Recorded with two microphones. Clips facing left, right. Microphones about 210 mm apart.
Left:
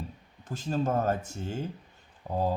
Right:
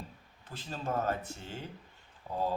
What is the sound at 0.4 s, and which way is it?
Speech, 45° left (ahead or behind).